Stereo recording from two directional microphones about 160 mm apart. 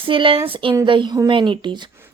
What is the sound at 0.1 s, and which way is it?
A woman's voice, 35° right (ahead or behind).